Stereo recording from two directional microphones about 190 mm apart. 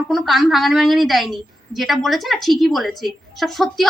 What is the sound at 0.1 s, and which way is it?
A woman's voice, centre (ahead or behind).